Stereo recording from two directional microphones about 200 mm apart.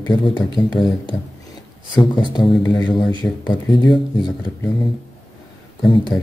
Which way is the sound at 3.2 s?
5° left (ahead or behind).